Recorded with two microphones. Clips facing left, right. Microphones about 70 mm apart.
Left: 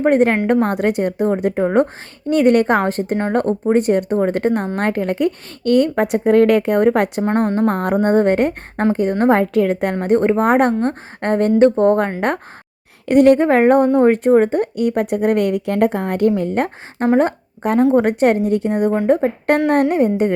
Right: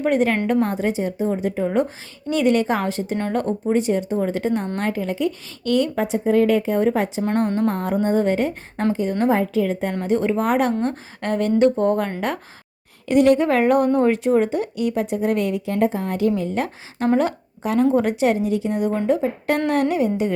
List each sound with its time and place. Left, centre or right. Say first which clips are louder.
0.0 s a woman's voice: left 5 dB; left
7.3 s a woman's voice: left 4 dB; left
7.7 s a woman's voice: left 5 dB; left
9.3 s a woman's voice: left 5 dB; left
10.0 s a woman's voice: left 5 dB; left